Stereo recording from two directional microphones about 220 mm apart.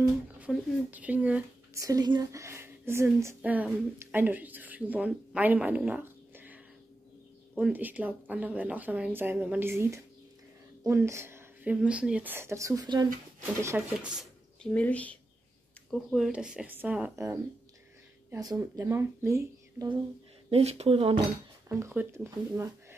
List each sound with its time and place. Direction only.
0.0 s a woman's voice: 5° right (ahead or behind)
20.4 s speech: 25° right (ahead or behind)
21.6 s a woman's voice: 10° right (ahead or behind)